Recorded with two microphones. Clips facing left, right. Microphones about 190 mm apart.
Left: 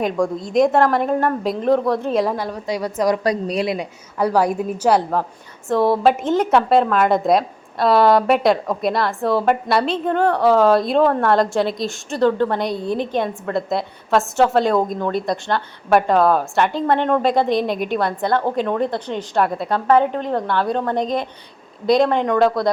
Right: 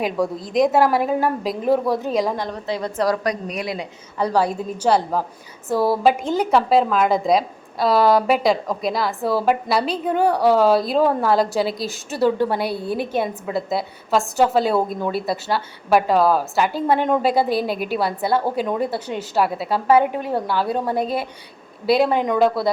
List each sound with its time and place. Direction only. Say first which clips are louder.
0.0 s a woman's voice: left 2 dB; centre (ahead or behind)
3.2 s a woman's voice: left 5 dB; 30° left (ahead or behind)
4.2 s a woman's voice: left 2 dB; 10° left (ahead or behind)
5.6 s a woman's voice: left 2 dB; 5° right (ahead or behind)